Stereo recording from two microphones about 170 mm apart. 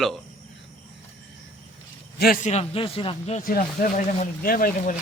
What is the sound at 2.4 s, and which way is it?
A man's voice, 40° left (ahead or behind).